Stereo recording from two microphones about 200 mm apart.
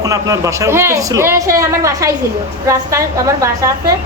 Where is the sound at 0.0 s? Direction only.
15° right (ahead or behind).